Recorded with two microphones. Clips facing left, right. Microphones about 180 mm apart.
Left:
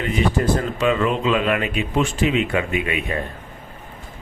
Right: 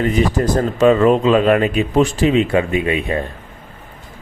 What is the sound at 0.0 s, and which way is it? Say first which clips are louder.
Speech: right 4 dB; 40° right (ahead or behind).